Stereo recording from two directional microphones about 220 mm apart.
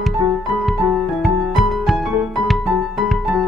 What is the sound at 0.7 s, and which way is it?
Music, centre (ahead or behind).